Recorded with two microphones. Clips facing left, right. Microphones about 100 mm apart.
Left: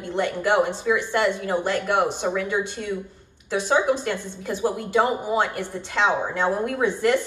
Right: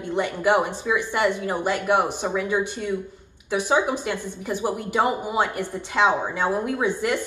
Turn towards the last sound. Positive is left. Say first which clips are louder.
# left 2 dB
turn(degrees=-10)  # may be behind; listen again after turning